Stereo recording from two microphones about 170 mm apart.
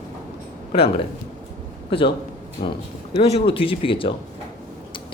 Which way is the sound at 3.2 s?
35° left (ahead or behind).